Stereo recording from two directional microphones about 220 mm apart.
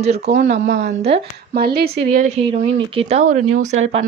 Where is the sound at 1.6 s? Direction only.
45° right (ahead or behind).